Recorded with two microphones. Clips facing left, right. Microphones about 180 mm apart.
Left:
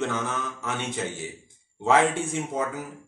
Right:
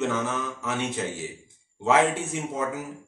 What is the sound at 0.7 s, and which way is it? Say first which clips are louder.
A man's voice: right 2 dB; centre (ahead or behind).